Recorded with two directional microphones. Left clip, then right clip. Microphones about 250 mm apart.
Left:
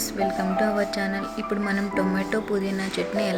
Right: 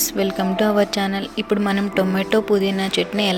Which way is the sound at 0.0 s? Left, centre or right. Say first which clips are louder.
Right 4 dB; centre.